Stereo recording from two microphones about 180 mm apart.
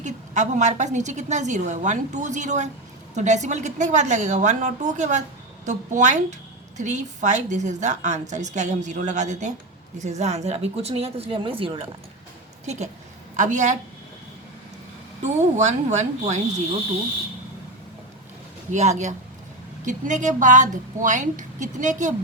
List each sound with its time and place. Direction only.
0.0 s a woman's voice: 40° right (ahead or behind)
15.5 s a woman's voice: 40° right (ahead or behind)
18.7 s a woman's voice: 40° right (ahead or behind)